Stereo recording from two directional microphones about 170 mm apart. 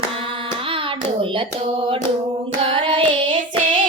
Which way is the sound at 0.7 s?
30° right (ahead or behind).